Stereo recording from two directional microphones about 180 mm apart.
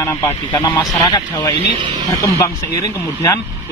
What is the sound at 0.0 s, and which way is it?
A man's voice, 15° left (ahead or behind).